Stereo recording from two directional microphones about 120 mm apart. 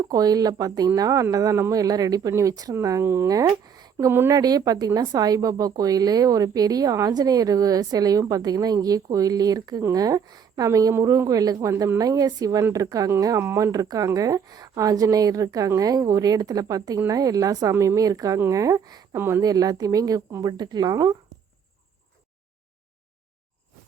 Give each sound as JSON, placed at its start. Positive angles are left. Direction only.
{"t": 0.0, "sound": "speech", "side_deg": -30}
{"t": 3.9, "sound": "speech", "side_deg": -20}